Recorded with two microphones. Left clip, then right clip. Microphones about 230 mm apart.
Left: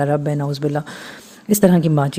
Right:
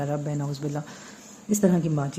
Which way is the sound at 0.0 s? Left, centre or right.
Left.